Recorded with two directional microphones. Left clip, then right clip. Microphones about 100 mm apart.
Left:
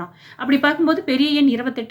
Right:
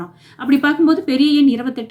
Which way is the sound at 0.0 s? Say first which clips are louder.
Right 1 dB; 35° right (ahead or behind).